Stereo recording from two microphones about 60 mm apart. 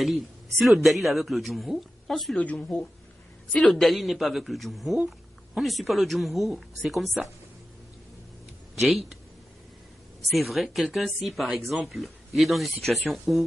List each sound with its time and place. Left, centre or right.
0.0 s speech: centre
2.4 s speech: left
3.6 s speech: centre
8.7 s speech: centre
10.3 s speech: centre